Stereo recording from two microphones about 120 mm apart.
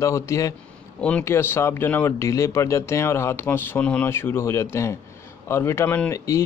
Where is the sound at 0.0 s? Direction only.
25° left (ahead or behind).